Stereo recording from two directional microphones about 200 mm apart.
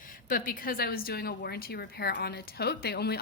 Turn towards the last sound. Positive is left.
turn(degrees=55)  # may be behind; listen again after turning